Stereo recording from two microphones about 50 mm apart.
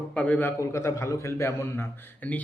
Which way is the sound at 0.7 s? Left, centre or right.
Left.